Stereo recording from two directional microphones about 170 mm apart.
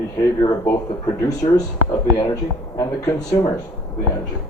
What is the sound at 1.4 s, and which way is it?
Speech, 35° left (ahead or behind).